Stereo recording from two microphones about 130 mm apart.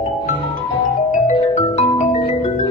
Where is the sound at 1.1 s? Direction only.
70° left (ahead or behind).